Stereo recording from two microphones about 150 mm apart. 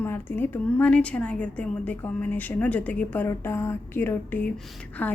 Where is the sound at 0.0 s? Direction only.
15° left (ahead or behind).